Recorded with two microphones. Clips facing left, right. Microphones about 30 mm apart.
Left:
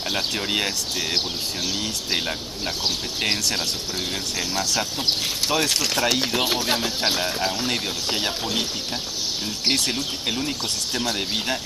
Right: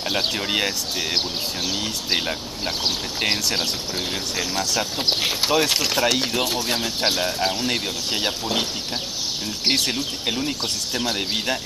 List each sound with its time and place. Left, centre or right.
0.3 s speech: centre
4.9 s speech: right
5.5 s speech: centre
9.7 s speech: centre